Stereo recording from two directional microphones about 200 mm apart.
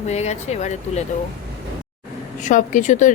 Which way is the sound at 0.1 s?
35° left (ahead or behind).